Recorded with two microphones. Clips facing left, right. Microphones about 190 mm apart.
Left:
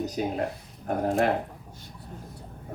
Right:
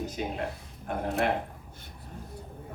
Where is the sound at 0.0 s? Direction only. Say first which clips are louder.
Left 4 dB; 40° left (ahead or behind).